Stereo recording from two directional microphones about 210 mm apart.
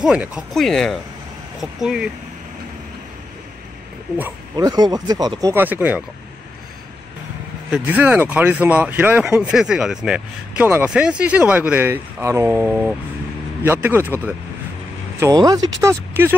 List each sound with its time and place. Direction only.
0.0 s speech: 5° right (ahead or behind)
4.2 s speech: 15° right (ahead or behind)
7.7 s speech: 10° right (ahead or behind)